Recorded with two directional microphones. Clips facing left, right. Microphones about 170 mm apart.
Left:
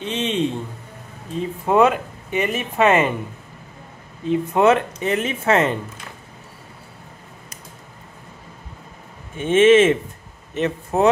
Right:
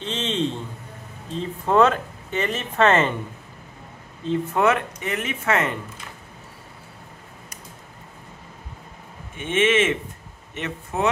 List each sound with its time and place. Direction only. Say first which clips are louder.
0.0 s a man's voice: left 3 dB; 15° left (ahead or behind)
4.2 s speech: left 4 dB; 15° left (ahead or behind)
4.6 s speech: left 5 dB; 25° left (ahead or behind)
9.4 s a man's voice: left 8 dB; 35° left (ahead or behind)